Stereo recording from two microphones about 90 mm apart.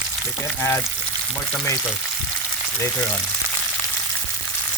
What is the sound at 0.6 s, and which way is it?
Frying, 30° left (ahead or behind).